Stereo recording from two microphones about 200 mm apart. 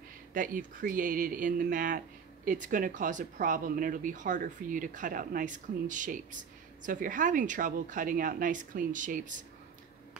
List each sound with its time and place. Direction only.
0.3 s speech: 40° right (ahead or behind)